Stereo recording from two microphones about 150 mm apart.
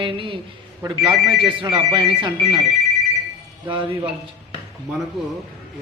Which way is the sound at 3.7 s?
35° right (ahead or behind).